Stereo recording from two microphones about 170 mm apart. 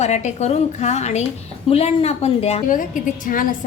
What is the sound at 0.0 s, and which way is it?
A woman's voice, 45° left (ahead or behind).